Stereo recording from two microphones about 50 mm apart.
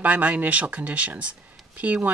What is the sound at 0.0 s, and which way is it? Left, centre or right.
Speech, right.